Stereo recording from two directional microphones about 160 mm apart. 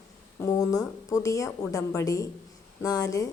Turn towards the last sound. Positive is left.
turn(degrees=20)  # may be behind; listen again after turning